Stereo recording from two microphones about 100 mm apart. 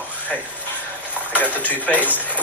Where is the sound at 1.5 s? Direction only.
15° left (ahead or behind).